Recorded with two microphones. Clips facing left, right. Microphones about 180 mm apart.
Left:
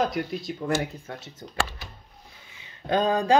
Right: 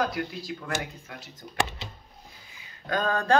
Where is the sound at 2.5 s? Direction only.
25° left (ahead or behind).